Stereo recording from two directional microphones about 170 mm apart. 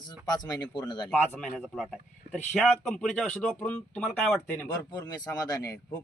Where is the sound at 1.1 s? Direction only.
10° left (ahead or behind).